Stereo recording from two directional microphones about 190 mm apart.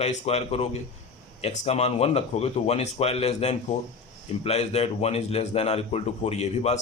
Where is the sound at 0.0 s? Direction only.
35° left (ahead or behind).